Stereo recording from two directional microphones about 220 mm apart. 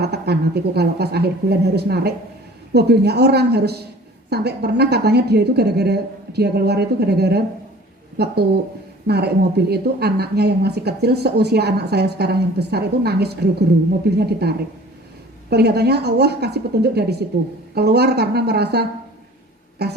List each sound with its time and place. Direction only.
0.0 s a woman's voice: 45° right (ahead or behind)